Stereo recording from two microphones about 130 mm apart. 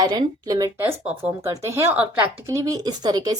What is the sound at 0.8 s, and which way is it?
A woman's voice, 15° right (ahead or behind).